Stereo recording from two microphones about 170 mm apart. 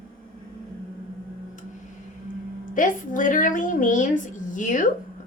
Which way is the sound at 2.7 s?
50° left (ahead or behind).